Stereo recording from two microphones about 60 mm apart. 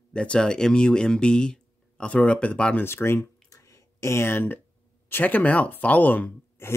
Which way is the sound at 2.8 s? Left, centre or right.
Left.